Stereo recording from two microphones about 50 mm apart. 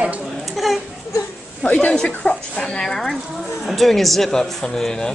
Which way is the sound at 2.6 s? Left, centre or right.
Centre.